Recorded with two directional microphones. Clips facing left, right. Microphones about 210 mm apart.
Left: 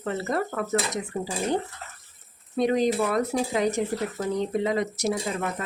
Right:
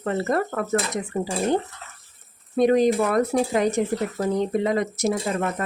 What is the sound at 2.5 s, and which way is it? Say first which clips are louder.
Speech: right 4 dB; 50° right (ahead or behind).